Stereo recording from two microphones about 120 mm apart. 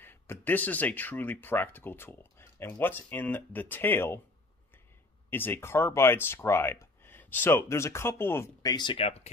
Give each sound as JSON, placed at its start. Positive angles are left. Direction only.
{"t": 0.0, "sound": "speech", "side_deg": 15}
{"t": 5.3, "sound": "speech", "side_deg": 20}
{"t": 8.6, "sound": "speech", "side_deg": 40}